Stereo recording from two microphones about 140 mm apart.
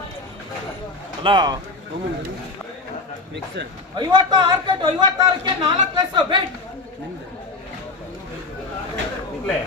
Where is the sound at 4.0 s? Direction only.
30° right (ahead or behind).